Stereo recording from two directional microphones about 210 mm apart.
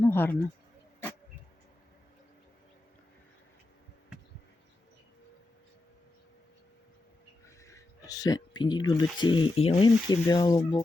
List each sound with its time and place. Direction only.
0.0 s speech: 10° left (ahead or behind)
7.4 s speech: 15° left (ahead or behind)